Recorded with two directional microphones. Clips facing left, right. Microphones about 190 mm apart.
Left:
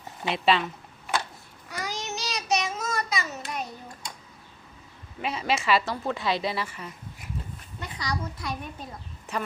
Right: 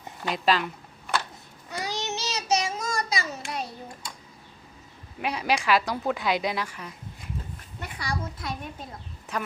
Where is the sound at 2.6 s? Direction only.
35° right (ahead or behind).